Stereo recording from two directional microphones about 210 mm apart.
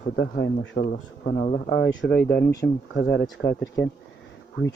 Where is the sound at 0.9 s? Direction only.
35° left (ahead or behind).